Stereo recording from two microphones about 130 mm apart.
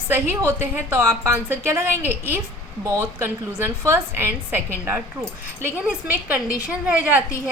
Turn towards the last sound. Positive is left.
turn(degrees=-10)  # may be behind; listen again after turning